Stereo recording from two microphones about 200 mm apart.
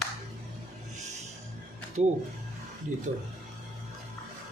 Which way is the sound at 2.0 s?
30° right (ahead or behind).